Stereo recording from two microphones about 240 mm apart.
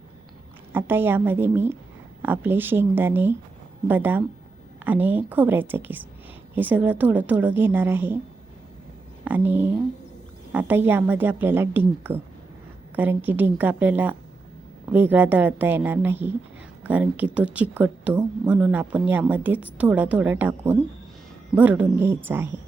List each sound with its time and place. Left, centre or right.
0.7 s a woman's voice: centre
9.2 s a woman's voice: centre